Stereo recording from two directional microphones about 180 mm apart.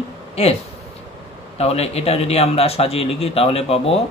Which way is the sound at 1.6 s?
35° left (ahead or behind).